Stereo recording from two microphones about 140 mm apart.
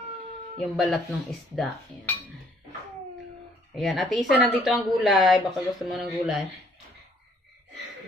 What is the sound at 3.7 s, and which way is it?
Speech, centre (ahead or behind).